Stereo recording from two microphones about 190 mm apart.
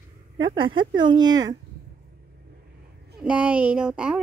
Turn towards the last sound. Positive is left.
turn(degrees=-5)  # may be behind; listen again after turning